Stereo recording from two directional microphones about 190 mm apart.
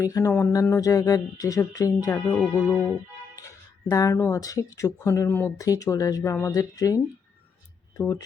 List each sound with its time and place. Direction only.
0.0 s speech: 15° left (ahead or behind)
2.3 s speech: 5° left (ahead or behind)
3.8 s speech: 15° left (ahead or behind)